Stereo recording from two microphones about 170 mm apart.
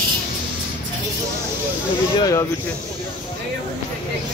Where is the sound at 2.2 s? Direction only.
20° left (ahead or behind).